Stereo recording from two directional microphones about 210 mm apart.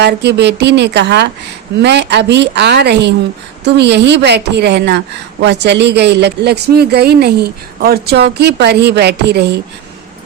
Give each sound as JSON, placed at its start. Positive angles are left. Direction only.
{"t": 0.0, "sound": "a woman's voice", "side_deg": -55}